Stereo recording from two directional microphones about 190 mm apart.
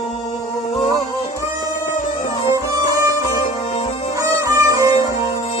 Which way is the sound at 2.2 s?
25° left (ahead or behind).